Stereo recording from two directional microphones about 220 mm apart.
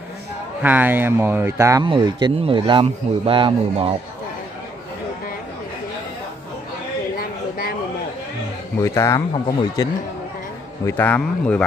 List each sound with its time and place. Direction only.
0.6 s speech: 10° right (ahead or behind); by 3.9 s 25° right (ahead or behind)
7.2 s a sound: 40° left (ahead or behind)
8.8 s a man's voice: 15° left (ahead or behind)